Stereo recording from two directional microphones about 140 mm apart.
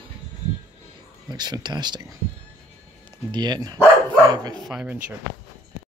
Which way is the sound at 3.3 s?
30° right (ahead or behind).